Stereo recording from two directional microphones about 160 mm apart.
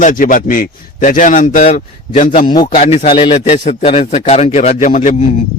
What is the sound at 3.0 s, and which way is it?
A man's voice, 30° left (ahead or behind).